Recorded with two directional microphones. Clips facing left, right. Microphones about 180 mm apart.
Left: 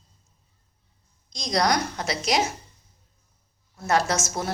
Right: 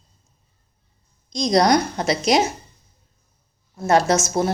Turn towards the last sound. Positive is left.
turn(degrees=-20)  # may be behind; listen again after turning